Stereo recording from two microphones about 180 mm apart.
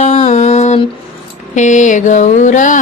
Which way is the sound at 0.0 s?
40° left (ahead or behind).